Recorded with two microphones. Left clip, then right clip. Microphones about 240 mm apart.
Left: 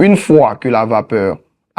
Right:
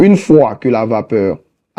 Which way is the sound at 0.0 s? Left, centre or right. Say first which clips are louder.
Even; left.